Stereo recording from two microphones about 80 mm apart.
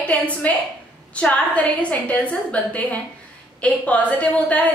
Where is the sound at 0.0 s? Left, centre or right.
Centre.